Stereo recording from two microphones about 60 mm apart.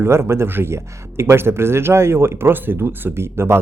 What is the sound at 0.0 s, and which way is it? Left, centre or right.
Speech, right.